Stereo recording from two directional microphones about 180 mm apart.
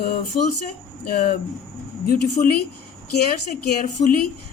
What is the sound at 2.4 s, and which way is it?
Speech, 45° left (ahead or behind).